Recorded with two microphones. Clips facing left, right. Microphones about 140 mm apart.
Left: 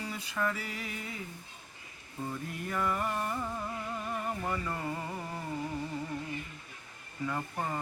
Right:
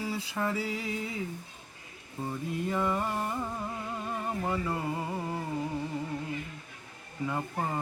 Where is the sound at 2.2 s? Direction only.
20° right (ahead or behind).